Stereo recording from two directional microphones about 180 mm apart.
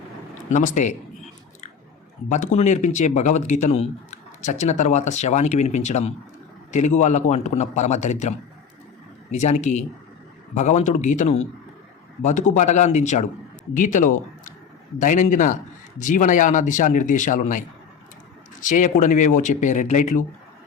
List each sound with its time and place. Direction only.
0.5 s speech: 45° left (ahead or behind)
2.3 s speech: 40° left (ahead or behind)
18.6 s speech: 45° left (ahead or behind)